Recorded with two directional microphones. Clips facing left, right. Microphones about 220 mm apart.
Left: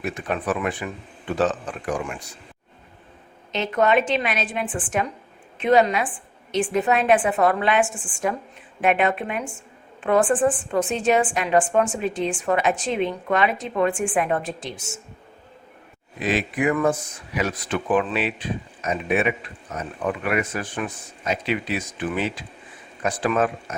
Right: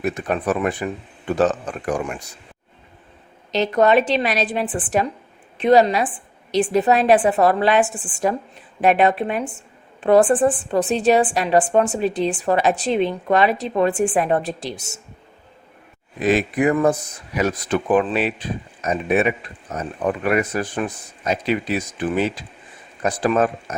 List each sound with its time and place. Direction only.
0.0 s a woman's voice: 40° right (ahead or behind)
3.5 s a woman's voice: 35° right (ahead or behind)
16.2 s a woman's voice: 40° right (ahead or behind)